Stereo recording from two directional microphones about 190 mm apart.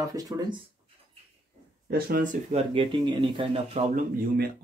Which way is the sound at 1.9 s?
55° right (ahead or behind).